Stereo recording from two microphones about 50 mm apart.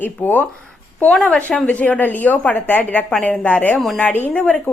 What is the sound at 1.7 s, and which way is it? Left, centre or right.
A woman's voice, left.